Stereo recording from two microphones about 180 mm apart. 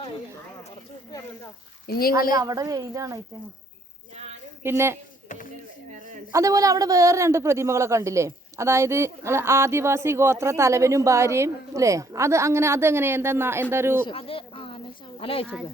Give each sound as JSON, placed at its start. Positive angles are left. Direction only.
{"t": 1.9, "sound": "a woman's voice", "side_deg": 55}
{"t": 2.3, "sound": "speech", "side_deg": -20}
{"t": 4.6, "sound": "a man's voice", "side_deg": -15}
{"t": 6.3, "sound": "a man's voice", "side_deg": -20}
{"t": 14.1, "sound": "a sound", "side_deg": 30}
{"t": 15.2, "sound": "speech", "side_deg": 30}